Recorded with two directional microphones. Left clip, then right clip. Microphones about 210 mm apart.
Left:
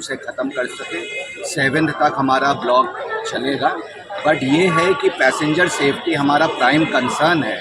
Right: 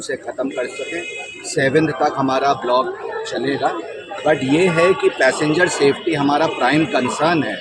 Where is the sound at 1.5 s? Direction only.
10° right (ahead or behind).